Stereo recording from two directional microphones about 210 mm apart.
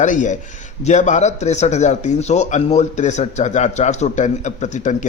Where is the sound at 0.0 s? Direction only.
35° left (ahead or behind).